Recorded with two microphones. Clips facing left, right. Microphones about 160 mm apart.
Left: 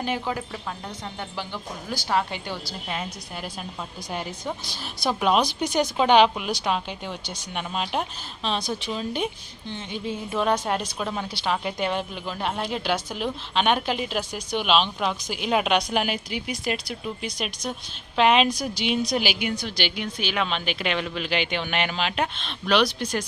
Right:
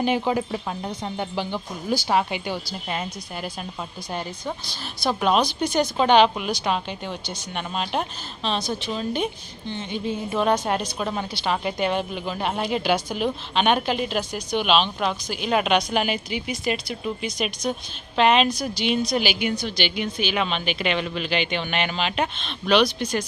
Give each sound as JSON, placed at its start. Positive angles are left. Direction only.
{"t": 0.0, "sound": "speech", "side_deg": -20}
{"t": 2.9, "sound": "a woman's voice", "side_deg": 0}